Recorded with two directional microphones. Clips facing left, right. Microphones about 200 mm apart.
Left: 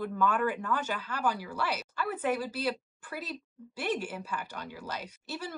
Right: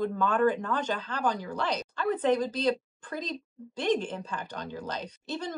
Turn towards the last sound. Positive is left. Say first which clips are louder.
# right 4 dB
turn(degrees=10)  # may be behind; listen again after turning